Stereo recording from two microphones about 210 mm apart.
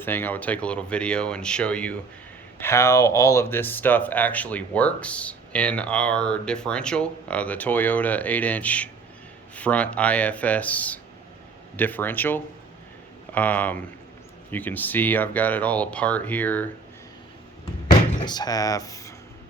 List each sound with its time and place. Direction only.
0.0 s speech: 10° left (ahead or behind)
18.2 s speech: 20° left (ahead or behind)